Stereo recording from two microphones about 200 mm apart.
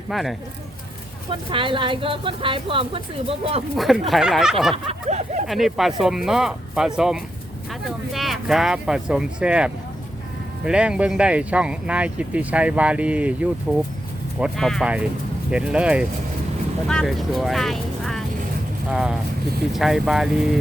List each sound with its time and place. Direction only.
0.1 s speech: centre (ahead or behind)
1.3 s speech: 25° right (ahead or behind)
3.8 s speech: centre (ahead or behind)
4.7 s speech: 30° right (ahead or behind)
5.5 s speech: centre (ahead or behind)